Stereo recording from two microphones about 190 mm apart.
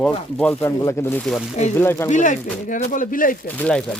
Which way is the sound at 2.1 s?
40° left (ahead or behind).